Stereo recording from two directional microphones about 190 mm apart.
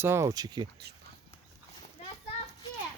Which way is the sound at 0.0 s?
15° right (ahead or behind).